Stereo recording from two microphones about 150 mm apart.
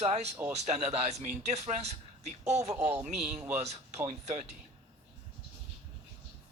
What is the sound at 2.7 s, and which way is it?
Speech, 10° right (ahead or behind).